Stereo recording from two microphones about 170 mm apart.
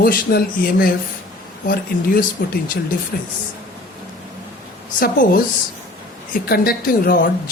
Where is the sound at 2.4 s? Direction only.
55° left (ahead or behind).